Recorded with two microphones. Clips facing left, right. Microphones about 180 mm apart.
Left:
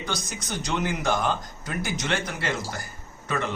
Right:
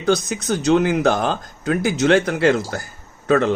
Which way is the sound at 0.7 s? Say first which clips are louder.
Right 10 dB; 85° right.